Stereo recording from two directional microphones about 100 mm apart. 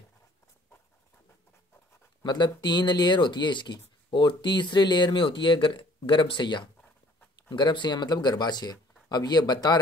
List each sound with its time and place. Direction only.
2.2 s speech: 45° left (ahead or behind)